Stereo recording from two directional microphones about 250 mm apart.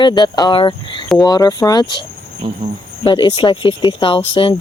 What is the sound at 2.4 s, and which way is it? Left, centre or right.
Speech, right.